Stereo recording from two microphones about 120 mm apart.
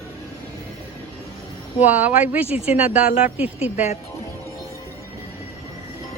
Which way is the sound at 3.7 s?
65° left (ahead or behind).